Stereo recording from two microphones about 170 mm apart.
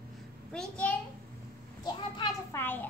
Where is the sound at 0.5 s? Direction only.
5° left (ahead or behind).